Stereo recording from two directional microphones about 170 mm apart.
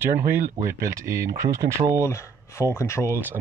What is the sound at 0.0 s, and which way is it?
Speech, 15° right (ahead or behind).